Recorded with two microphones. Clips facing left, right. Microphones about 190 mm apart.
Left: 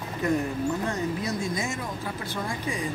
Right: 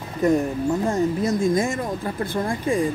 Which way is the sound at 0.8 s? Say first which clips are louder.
Right 7 dB; 50° right (ahead or behind).